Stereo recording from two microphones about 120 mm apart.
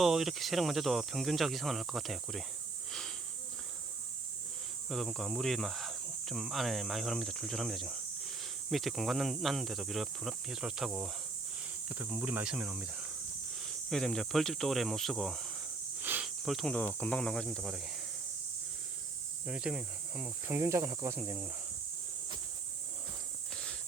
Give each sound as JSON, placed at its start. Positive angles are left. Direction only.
{"t": 0.0, "sound": "speech", "side_deg": 0}
{"t": 4.9, "sound": "speech", "side_deg": 0}
{"t": 11.9, "sound": "speech", "side_deg": -15}
{"t": 13.6, "sound": "speech", "side_deg": 0}
{"t": 16.0, "sound": "cricket", "side_deg": -15}
{"t": 16.2, "sound": "cricket", "side_deg": 0}
{"t": 16.7, "sound": "speech", "side_deg": 15}
{"t": 19.5, "sound": "speech", "side_deg": -5}
{"t": 20.6, "sound": "speech", "side_deg": -25}